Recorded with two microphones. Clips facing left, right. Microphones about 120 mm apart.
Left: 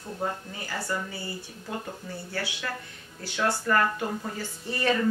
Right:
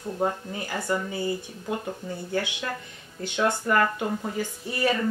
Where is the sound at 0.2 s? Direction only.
20° right (ahead or behind).